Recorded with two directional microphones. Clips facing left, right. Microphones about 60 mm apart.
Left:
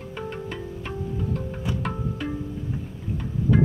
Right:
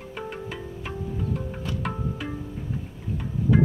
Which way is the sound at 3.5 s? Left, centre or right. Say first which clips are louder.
Even; centre.